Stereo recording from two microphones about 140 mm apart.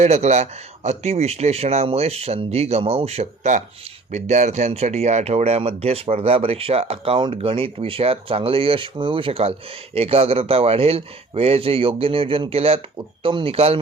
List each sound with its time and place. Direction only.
0.0 s speech: 55° right (ahead or behind)